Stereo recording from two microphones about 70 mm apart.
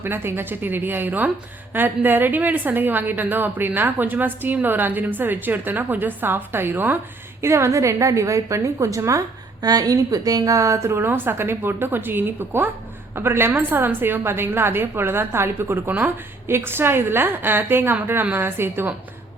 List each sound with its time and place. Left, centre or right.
0.0 s a woman's voice: right
7.4 s a woman's voice: right